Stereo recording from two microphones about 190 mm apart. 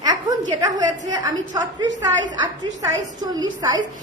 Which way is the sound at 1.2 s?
20° right (ahead or behind).